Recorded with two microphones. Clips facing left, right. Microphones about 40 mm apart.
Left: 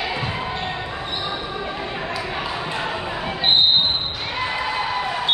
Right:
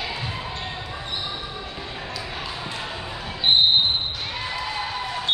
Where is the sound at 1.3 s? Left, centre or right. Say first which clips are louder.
Left 6 dB; left.